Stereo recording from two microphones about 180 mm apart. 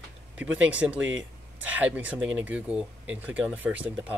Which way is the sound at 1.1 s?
90° right.